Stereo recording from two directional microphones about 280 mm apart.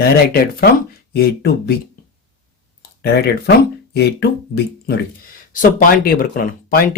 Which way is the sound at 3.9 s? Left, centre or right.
Left.